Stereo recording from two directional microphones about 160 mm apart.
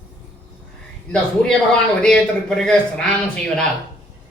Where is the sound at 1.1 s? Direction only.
5° left (ahead or behind).